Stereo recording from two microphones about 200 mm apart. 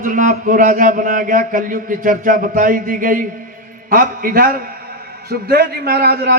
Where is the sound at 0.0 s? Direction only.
40° right (ahead or behind).